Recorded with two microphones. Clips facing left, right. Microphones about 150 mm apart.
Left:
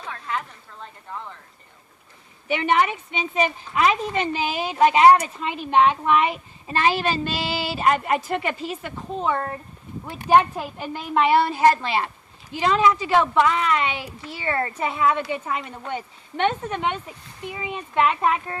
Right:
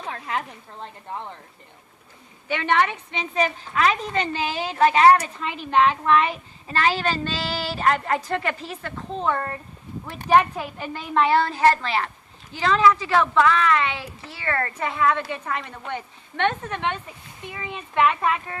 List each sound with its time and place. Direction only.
0.1 s a woman's voice: 30° right (ahead or behind)
2.5 s a woman's voice: 15° left (ahead or behind)